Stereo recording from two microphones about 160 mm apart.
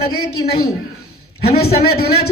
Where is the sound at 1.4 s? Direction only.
75° left (ahead or behind).